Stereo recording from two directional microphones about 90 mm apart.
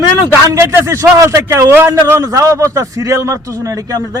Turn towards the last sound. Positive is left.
turn(degrees=-40)  # may be behind; listen again after turning